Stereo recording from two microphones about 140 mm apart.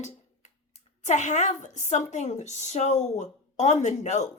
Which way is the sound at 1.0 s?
60° left (ahead or behind).